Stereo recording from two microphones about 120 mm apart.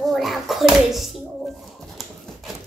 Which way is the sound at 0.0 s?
Centre (ahead or behind).